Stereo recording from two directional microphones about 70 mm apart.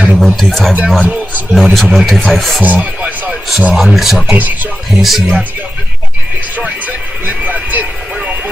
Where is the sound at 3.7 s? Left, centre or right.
Centre.